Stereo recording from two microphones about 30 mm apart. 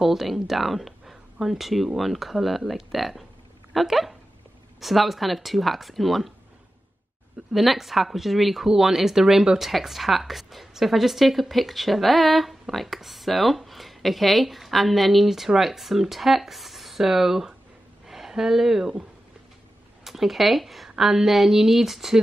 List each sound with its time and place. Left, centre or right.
0.0 s speech: centre
7.5 s speech: centre
20.1 s speech: centre